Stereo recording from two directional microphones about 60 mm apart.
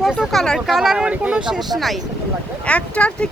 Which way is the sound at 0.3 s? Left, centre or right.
Centre.